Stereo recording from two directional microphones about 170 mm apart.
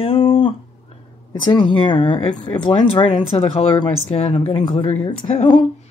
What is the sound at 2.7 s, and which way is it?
Speech, 30° left (ahead or behind).